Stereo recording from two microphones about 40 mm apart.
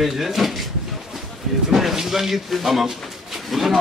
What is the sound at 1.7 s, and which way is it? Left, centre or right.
Speech, centre.